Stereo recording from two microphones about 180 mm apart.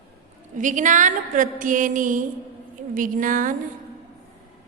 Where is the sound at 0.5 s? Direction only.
45° right (ahead or behind).